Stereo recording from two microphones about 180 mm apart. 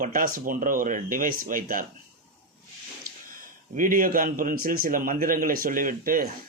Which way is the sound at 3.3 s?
50° right (ahead or behind).